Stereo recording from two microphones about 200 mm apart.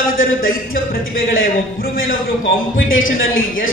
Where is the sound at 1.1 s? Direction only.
80° left.